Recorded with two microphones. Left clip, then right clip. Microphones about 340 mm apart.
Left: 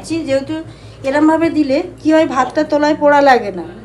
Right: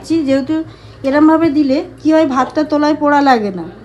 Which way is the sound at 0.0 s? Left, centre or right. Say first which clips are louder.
Right 2 dB; right.